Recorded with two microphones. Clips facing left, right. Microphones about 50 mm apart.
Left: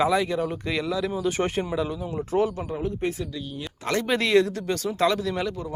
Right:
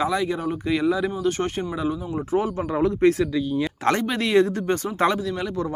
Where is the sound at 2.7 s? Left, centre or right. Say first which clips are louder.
Right 9 dB; right.